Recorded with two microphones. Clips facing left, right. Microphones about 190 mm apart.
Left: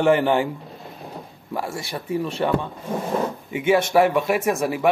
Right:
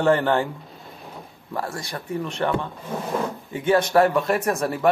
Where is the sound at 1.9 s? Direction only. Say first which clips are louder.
Left 3 dB; 15° left (ahead or behind).